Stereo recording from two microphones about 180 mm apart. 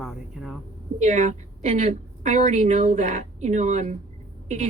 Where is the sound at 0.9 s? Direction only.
40° right (ahead or behind).